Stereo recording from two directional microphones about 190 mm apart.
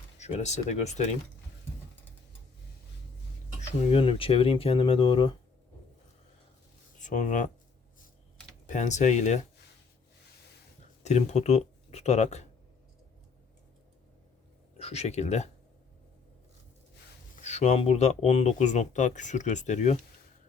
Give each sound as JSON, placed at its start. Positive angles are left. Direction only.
{"t": 0.2, "sound": "speech", "side_deg": 35}
{"t": 3.7, "sound": "speech", "side_deg": 30}
{"t": 7.0, "sound": "speech", "side_deg": 40}
{"t": 8.6, "sound": "speech", "side_deg": 40}
{"t": 11.0, "sound": "speech", "side_deg": 35}
{"t": 14.8, "sound": "speech", "side_deg": 35}
{"t": 17.3, "sound": "speech", "side_deg": 35}